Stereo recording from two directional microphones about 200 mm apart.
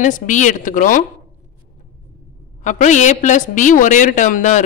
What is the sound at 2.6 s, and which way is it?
A woman's voice, 35° left (ahead or behind).